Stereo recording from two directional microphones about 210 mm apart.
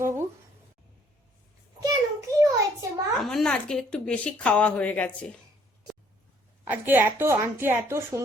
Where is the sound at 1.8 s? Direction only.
15° right (ahead or behind).